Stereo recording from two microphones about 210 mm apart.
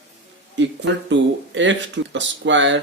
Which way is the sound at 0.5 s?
60° right (ahead or behind).